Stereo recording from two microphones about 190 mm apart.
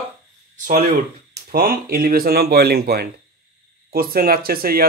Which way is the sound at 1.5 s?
50° right (ahead or behind).